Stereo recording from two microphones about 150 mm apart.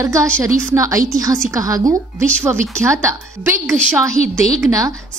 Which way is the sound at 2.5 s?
15° right (ahead or behind).